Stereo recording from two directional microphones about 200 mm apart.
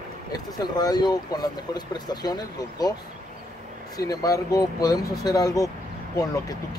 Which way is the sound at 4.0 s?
15° left (ahead or behind).